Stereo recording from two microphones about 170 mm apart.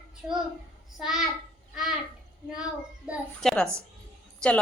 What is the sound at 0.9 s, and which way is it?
A woman's voice, centre (ahead or behind).